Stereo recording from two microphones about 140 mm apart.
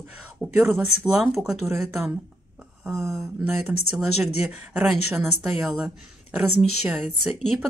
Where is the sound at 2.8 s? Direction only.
20° right (ahead or behind).